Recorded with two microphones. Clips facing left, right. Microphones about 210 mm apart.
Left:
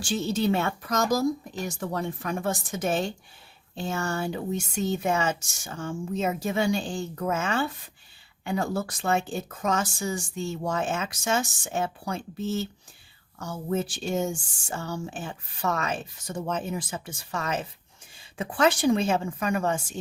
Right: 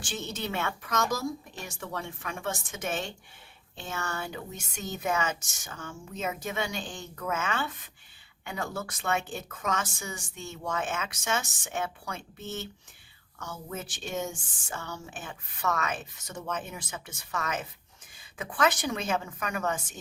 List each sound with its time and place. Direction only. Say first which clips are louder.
0.0 s a woman's voice: left 10 dB; 30° left (ahead or behind)